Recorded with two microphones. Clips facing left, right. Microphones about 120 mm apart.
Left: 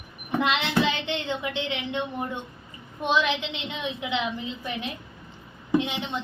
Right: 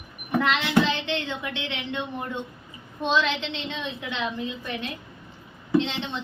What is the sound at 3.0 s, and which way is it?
A woman's voice, 10° left (ahead or behind).